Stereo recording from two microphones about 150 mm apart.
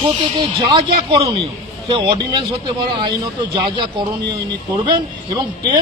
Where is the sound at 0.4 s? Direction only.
35° right (ahead or behind).